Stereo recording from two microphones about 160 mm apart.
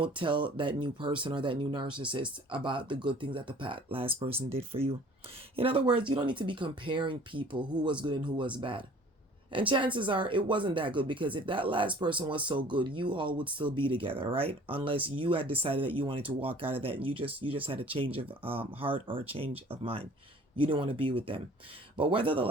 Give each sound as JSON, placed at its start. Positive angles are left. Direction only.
{"t": 0.0, "sound": "speech", "side_deg": -30}